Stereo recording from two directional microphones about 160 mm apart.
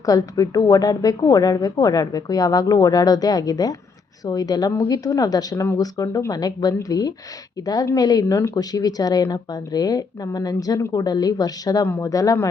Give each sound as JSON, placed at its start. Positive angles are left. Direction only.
{"t": 0.0, "sound": "speech", "side_deg": 20}